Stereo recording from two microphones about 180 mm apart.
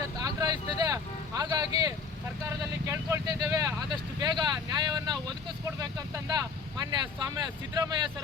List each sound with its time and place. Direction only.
0.2 s vehicle: 20° right (ahead or behind)
1.4 s speech: 20° right (ahead or behind)
2.8 s vehicle: 15° right (ahead or behind)
4.2 s speech: 20° right (ahead or behind)